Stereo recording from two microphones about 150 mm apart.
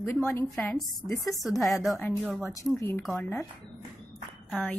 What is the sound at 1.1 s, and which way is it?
Speech, centre (ahead or behind).